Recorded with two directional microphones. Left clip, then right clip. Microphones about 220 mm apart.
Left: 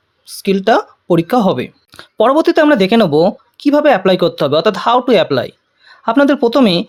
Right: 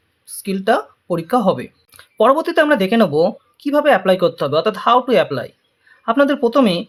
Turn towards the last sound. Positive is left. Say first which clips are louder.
# left 3 dB
turn(degrees=35)  # may be behind; listen again after turning